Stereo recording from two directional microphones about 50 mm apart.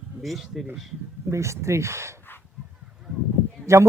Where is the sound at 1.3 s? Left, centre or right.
Right.